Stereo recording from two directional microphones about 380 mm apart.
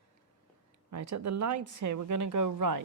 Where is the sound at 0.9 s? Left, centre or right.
Right.